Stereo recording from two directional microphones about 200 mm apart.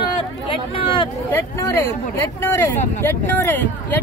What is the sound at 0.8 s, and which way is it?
Speech, 25° left (ahead or behind).